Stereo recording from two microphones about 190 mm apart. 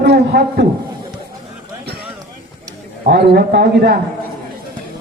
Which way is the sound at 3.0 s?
55° right (ahead or behind).